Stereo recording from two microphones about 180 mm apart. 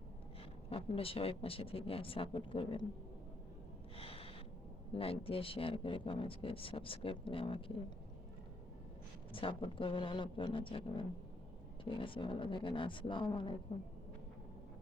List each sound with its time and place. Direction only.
0.7 s speech: 30° left (ahead or behind)
3.9 s gasp: 30° left (ahead or behind)
4.9 s speech: 30° left (ahead or behind)
9.3 s speech: 30° left (ahead or behind)